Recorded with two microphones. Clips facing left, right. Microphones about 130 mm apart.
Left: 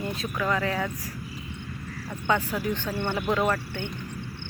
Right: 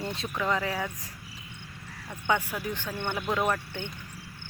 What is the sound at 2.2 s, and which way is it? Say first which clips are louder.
Speech: left 3 dB; 15° right (ahead or behind).